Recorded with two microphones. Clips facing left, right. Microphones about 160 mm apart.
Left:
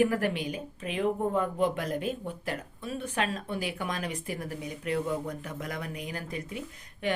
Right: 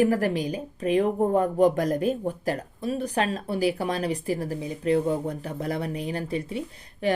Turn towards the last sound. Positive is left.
turn(degrees=-35)  # may be behind; listen again after turning